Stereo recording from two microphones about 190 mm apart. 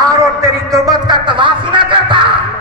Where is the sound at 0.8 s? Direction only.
25° right (ahead or behind).